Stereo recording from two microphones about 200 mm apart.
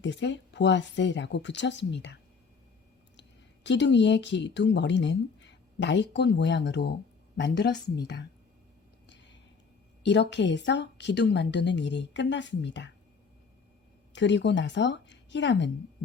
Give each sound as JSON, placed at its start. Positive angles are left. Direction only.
{"t": 0.0, "sound": "a woman's voice", "side_deg": 65}
{"t": 3.2, "sound": "a woman's voice", "side_deg": 60}
{"t": 10.0, "sound": "a woman's voice", "side_deg": 60}
{"t": 14.1, "sound": "a woman's voice", "side_deg": 60}